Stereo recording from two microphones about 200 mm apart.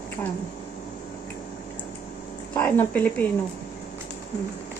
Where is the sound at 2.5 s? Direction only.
10° left (ahead or behind).